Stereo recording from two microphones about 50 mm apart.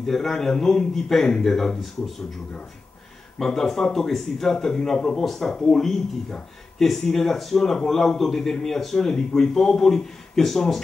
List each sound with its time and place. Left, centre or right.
0.0 s a man's voice: centre
3.3 s a man's voice: centre
5.5 s a man's voice: centre
6.8 s a man's voice: centre